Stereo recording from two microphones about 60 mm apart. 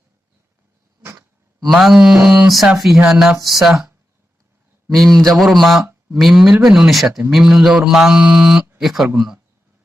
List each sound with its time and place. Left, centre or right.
1.6 s mantra: centre
2.2 s mantra: centre
2.7 s mantra: centre
4.9 s mantra: centre
8.8 s speech: centre
9.1 s mantra: centre